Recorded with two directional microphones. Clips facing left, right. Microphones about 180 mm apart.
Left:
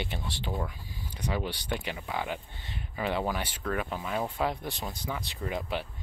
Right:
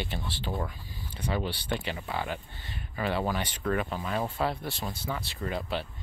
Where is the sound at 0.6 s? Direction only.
10° left (ahead or behind).